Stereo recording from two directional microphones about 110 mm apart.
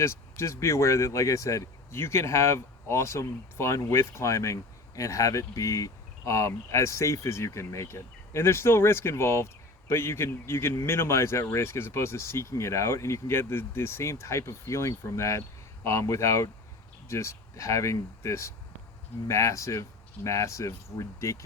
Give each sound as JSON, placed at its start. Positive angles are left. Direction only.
{"t": 0.0, "sound": "speech", "side_deg": 25}